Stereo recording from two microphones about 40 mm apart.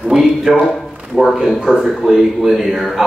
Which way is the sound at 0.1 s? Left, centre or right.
Centre.